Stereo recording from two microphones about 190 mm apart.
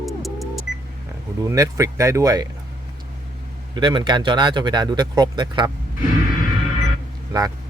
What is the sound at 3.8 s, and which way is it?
Speech, 25° right (ahead or behind).